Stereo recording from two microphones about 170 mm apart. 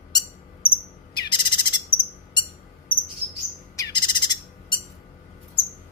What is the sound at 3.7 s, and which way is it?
Bird, 25° left (ahead or behind).